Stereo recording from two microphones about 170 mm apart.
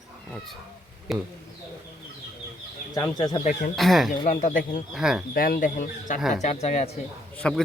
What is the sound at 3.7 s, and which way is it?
Speech, centre (ahead or behind).